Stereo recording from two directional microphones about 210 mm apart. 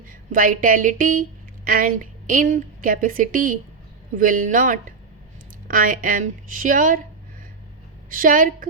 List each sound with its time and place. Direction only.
0.1 s speech: 40° right (ahead or behind)
8.1 s speech: 40° right (ahead or behind)